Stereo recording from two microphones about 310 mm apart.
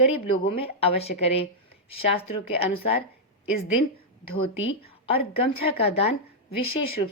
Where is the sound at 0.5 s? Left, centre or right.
Centre.